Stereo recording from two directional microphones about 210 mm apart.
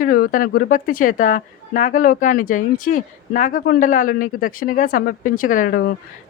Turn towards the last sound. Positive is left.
turn(degrees=45)  # may be behind; listen again after turning